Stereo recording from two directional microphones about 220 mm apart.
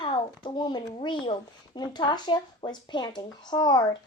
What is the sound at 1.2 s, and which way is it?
A child's voice, 20° left (ahead or behind).